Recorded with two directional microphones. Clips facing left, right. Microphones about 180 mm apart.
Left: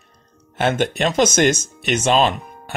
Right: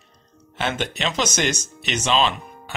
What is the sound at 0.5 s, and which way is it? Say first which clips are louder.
Speech: left 7 dB; 50° left (ahead or behind).